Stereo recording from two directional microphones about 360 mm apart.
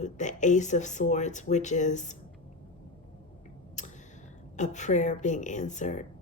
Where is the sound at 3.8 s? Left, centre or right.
Centre.